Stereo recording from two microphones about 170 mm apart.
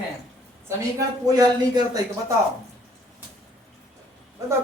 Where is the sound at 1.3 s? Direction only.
20° right (ahead or behind).